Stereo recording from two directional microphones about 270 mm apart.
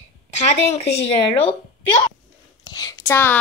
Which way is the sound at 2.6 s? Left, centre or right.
Centre.